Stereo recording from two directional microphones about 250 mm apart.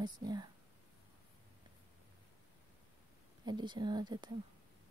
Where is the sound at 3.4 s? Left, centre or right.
Centre.